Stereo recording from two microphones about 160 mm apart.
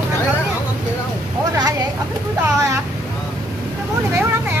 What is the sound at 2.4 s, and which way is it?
Speech, 20° right (ahead or behind).